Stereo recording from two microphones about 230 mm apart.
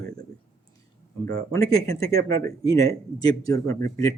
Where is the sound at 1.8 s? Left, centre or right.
Centre.